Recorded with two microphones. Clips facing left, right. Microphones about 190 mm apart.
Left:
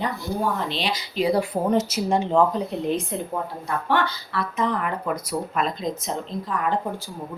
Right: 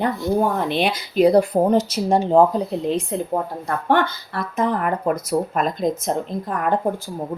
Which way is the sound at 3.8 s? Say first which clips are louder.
Right 5 dB; 50° right (ahead or behind).